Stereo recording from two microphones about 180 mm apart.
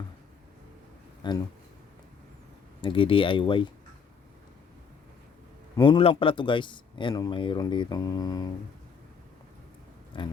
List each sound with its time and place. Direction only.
1.2 s speech: 25° left (ahead or behind)
2.8 s speech: 30° left (ahead or behind)
5.7 s speech: 25° left (ahead or behind)
10.1 s speech: 25° left (ahead or behind)